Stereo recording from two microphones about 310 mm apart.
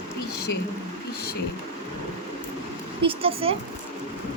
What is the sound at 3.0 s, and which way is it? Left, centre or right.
Speech, centre.